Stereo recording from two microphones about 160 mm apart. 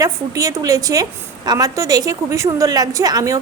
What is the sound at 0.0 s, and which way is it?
A woman's voice, 20° right (ahead or behind).